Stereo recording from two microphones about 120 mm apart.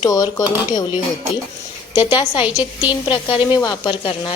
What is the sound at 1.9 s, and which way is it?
Speech, 40° left (ahead or behind).